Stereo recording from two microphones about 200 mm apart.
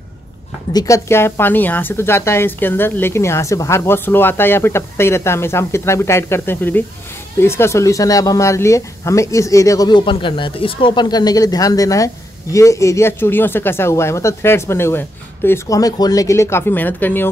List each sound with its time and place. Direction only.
0.7 s a woman's voice: 15° left (ahead or behind)